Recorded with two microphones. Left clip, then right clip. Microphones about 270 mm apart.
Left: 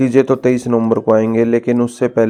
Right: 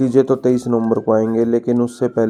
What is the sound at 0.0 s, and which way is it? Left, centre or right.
Speech, left.